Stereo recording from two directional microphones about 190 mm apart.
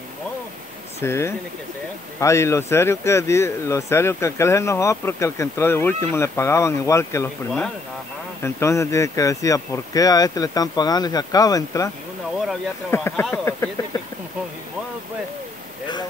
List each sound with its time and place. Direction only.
1.0 s speech: 15° left (ahead or behind)
12.9 s speech: 10° left (ahead or behind)